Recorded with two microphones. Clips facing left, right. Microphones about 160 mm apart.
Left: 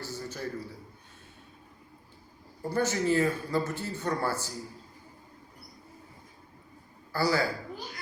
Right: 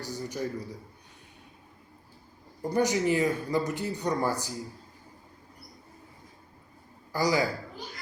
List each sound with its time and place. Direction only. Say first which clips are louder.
0.0 s a sound: right 3 dB; 15° right (ahead or behind)
2.6 s speech: right 3 dB; 15° right (ahead or behind)
7.1 s speech: right 1 dB; 15° right (ahead or behind)